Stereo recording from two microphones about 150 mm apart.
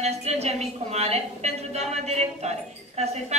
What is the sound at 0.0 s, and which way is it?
A woman's voice, 45° right (ahead or behind).